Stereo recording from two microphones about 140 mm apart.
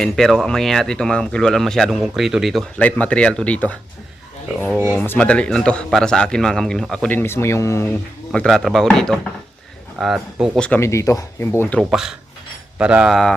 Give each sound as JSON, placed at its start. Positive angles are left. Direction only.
{"t": 0.0, "sound": "speech", "side_deg": 5}
{"t": 2.7, "sound": "a man's voice", "side_deg": 10}
{"t": 4.9, "sound": "a man's voice", "side_deg": 10}
{"t": 8.3, "sound": "speech", "side_deg": 5}
{"t": 10.8, "sound": "speech", "side_deg": 20}
{"t": 11.8, "sound": "speech", "side_deg": -5}